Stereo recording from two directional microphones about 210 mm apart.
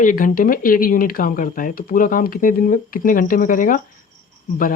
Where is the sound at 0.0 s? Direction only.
40° left (ahead or behind).